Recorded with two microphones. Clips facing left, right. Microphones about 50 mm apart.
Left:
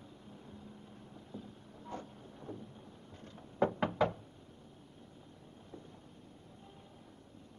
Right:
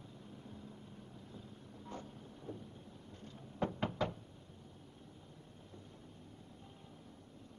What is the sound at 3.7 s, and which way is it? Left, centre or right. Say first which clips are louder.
Knock: left 6 dB; centre.